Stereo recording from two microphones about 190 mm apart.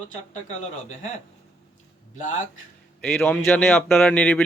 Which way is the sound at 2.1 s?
40° left (ahead or behind).